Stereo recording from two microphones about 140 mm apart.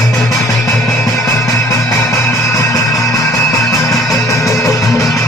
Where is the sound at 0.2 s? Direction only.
Centre (ahead or behind).